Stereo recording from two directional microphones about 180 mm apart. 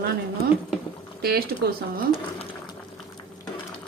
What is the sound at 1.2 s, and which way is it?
Speech, 60° right (ahead or behind).